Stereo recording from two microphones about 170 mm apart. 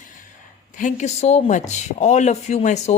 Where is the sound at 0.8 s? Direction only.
45° left (ahead or behind).